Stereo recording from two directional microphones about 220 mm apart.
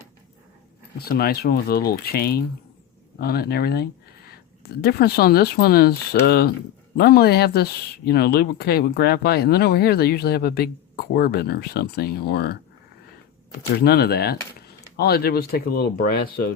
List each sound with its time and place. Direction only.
0.9 s speech: 45° left (ahead or behind)
13.7 s speech: 45° left (ahead or behind)